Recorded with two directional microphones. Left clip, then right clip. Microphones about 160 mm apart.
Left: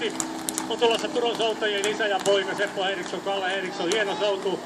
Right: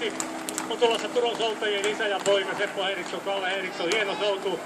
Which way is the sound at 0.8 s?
45° left (ahead or behind).